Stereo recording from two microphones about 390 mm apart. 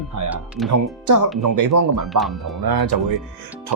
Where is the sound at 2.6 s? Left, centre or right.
Right.